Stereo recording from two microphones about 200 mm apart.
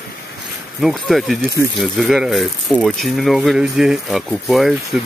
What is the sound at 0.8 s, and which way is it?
Speech, centre (ahead or behind).